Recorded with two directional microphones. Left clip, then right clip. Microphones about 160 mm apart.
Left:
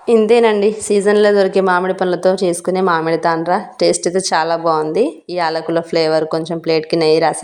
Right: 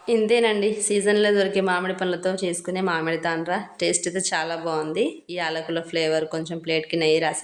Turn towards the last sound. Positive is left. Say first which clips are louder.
# left 8 dB
turn(degrees=35)  # may be behind; listen again after turning